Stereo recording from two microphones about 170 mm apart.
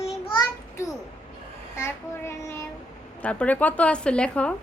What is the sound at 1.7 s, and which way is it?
Child singing, 15° left (ahead or behind).